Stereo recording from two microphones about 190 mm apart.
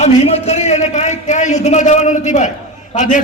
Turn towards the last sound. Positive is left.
turn(degrees=40)  # may be behind; listen again after turning